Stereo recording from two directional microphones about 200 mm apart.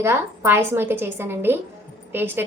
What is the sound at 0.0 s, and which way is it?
A woman's voice, 10° right (ahead or behind).